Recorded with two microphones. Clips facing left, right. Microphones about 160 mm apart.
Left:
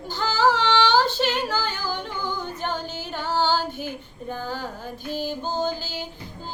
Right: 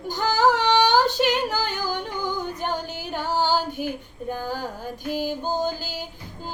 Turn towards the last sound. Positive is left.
turn(degrees=-10)  # may be behind; listen again after turning